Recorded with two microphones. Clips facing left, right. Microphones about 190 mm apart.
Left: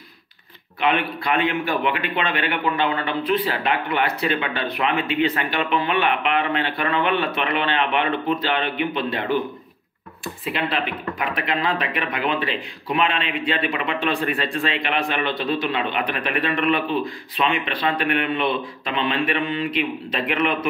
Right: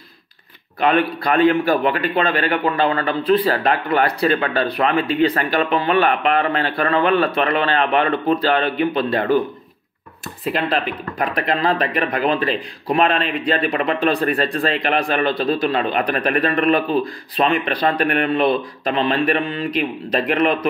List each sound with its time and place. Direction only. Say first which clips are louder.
0.7 s speech: right 5 dB; 40° right (ahead or behind)
10.5 s speech: right 4 dB; 40° right (ahead or behind)